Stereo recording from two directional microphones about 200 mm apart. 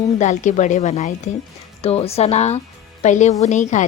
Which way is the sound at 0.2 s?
35° left (ahead or behind).